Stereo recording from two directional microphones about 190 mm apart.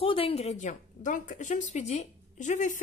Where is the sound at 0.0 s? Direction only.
30° left (ahead or behind).